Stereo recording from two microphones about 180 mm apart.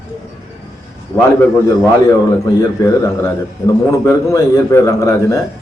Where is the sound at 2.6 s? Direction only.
15° left (ahead or behind).